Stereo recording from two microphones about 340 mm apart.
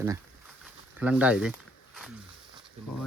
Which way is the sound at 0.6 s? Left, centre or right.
Centre.